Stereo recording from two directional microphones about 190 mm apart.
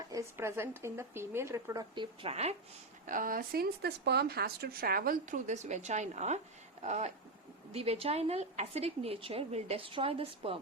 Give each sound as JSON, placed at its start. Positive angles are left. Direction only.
{"t": 0.1, "sound": "speech", "side_deg": -15}
{"t": 3.1, "sound": "speech", "side_deg": -45}